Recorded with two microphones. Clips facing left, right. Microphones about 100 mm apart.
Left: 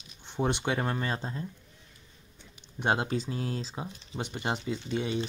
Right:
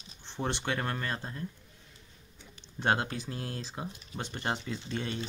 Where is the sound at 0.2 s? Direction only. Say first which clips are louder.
Left 5 dB; 15° left (ahead or behind).